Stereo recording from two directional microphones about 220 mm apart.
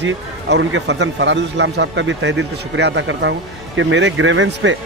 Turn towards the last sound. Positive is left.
turn(degrees=-60)  # may be behind; listen again after turning